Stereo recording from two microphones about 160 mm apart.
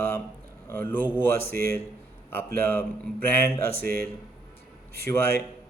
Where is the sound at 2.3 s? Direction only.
15° left (ahead or behind).